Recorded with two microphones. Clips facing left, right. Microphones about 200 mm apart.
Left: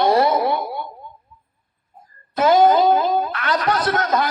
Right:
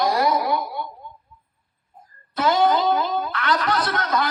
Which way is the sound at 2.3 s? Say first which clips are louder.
Left 5 dB; 45° left (ahead or behind).